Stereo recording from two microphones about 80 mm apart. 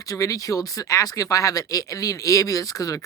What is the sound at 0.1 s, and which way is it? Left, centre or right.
Speech, left.